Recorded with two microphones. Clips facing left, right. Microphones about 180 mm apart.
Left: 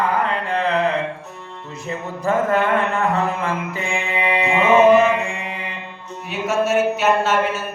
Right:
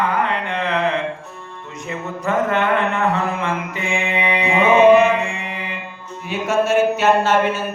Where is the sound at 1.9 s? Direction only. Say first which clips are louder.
Left 1 dB; 30° left (ahead or behind).